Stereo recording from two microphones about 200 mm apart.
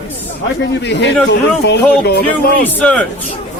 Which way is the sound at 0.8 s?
60° left (ahead or behind).